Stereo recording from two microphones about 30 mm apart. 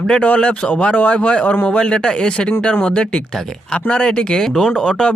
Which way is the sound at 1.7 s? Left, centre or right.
Left.